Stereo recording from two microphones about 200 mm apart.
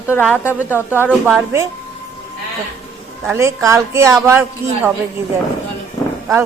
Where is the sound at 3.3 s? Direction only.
15° right (ahead or behind).